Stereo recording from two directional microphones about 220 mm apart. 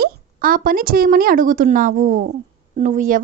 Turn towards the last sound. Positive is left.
turn(degrees=-35)  # may be behind; listen again after turning